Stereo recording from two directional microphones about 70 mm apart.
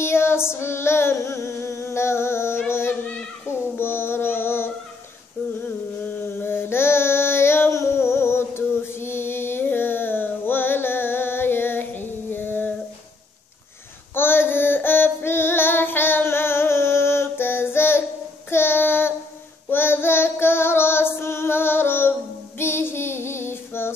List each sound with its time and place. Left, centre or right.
0.0 s female singing: left
2.7 s child singing: left
6.0 s a sound: left
14.1 s child singing: left